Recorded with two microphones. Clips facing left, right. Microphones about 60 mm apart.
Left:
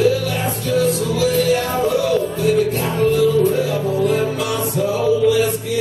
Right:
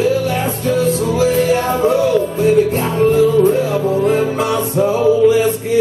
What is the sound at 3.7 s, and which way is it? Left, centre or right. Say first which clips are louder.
Music: right 3 dB; right.